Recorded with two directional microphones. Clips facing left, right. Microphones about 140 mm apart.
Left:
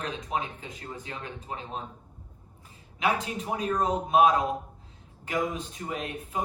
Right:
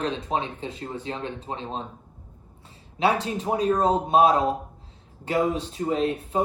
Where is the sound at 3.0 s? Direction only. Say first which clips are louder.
Right 5 dB; 35° right (ahead or behind).